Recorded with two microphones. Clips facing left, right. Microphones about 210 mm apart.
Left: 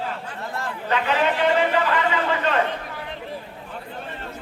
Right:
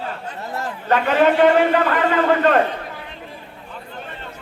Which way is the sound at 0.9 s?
50° right (ahead or behind).